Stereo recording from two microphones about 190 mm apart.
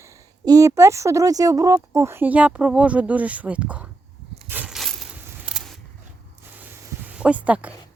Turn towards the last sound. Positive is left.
turn(degrees=-5)  # may be behind; listen again after turning